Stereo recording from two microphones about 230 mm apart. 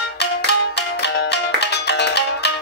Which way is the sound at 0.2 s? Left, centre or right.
Left.